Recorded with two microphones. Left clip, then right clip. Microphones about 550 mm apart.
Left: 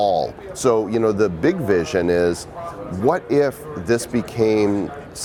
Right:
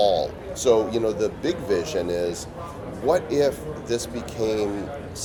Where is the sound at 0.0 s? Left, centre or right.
Left.